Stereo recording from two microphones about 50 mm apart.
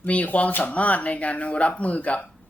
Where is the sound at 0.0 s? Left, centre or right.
Left.